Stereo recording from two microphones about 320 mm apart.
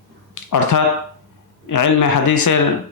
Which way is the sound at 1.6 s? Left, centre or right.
Left.